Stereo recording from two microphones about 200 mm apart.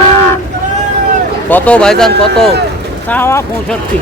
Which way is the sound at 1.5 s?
10° left (ahead or behind).